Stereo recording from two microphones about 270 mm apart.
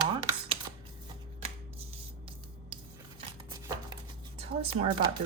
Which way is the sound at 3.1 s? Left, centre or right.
Centre.